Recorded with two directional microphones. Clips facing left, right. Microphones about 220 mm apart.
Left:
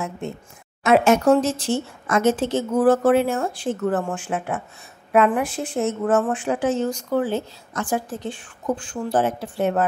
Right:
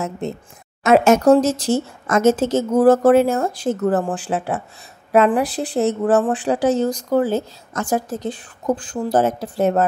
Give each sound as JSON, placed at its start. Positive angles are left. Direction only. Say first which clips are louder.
{"t": 0.8, "sound": "speech", "louder": "right 3 dB", "side_deg": -40}